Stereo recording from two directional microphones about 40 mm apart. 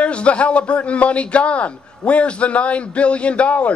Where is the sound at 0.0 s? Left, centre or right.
Left.